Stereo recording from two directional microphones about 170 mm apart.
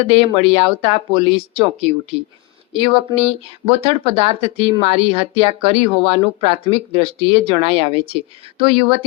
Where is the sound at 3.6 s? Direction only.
35° right (ahead or behind).